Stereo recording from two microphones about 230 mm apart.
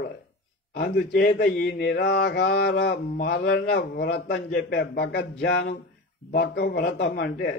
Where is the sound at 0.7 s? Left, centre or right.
Left.